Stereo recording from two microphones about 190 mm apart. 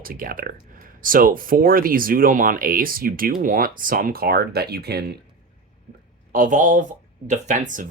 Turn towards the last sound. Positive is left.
turn(degrees=-40)  # may be behind; listen again after turning